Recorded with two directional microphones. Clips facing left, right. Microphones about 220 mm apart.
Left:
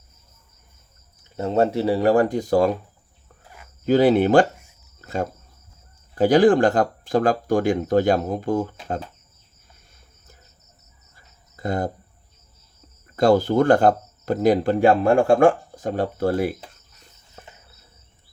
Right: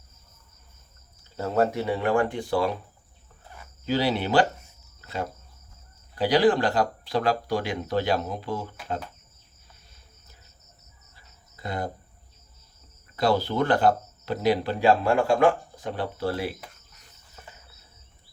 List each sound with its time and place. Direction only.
1.4 s speech: 25° left (ahead or behind); by 2.7 s 40° left (ahead or behind)
3.8 s speech: 50° left (ahead or behind)
4.9 s cricket: 45° left (ahead or behind)
6.1 s speech: 50° left (ahead or behind)
11.5 s speech: 45° left (ahead or behind)
13.1 s speech: 45° left (ahead or behind)